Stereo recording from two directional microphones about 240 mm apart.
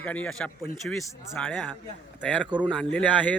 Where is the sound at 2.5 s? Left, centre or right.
Centre.